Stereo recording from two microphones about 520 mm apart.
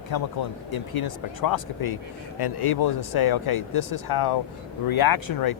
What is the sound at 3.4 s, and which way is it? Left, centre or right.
Speech, left.